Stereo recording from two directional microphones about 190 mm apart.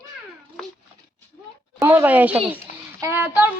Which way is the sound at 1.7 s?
10° right (ahead or behind).